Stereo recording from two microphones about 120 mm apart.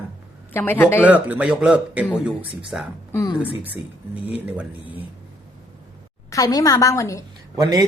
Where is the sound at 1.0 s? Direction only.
15° right (ahead or behind).